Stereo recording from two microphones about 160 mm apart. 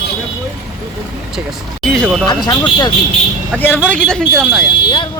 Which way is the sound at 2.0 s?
5° right (ahead or behind).